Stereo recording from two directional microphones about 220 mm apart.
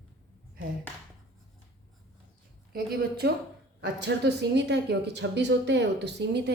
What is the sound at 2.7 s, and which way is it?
A woman's voice, 45° right (ahead or behind).